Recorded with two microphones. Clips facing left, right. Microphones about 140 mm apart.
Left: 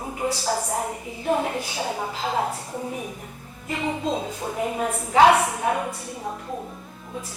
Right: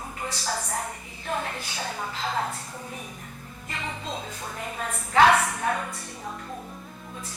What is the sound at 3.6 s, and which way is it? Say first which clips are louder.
A woman's voice: left 9 dB; 20° left (ahead or behind).